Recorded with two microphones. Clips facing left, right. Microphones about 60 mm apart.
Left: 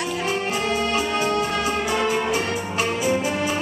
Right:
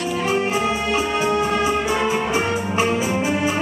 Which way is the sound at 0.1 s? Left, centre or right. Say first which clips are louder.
Right 7 dB; centre.